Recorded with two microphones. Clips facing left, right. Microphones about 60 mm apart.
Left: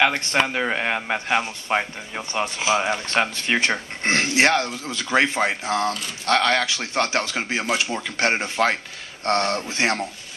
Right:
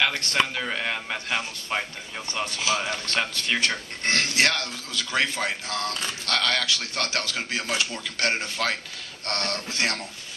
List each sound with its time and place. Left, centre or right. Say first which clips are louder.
0.0 s a man's voice: left 4 dB; left